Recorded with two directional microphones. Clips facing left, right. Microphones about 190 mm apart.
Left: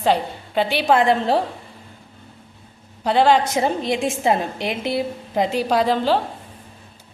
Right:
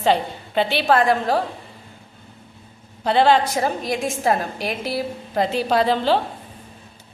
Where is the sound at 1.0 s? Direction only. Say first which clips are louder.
Left 1 dB; 25° left (ahead or behind).